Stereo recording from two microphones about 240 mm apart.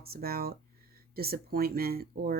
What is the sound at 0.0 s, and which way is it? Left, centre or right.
Speech, right.